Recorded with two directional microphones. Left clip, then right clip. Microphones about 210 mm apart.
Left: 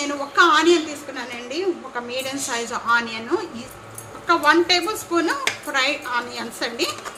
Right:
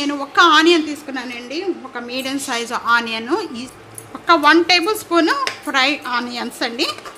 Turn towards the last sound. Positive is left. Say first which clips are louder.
# right 4 dB
turn(degrees=-45)  # may be behind; listen again after turning